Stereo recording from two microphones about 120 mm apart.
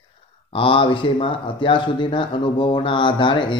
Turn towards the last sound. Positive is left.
turn(degrees=40)  # may be behind; listen again after turning